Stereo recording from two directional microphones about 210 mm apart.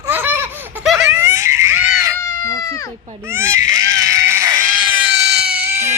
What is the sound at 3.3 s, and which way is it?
Speech, 10° right (ahead or behind).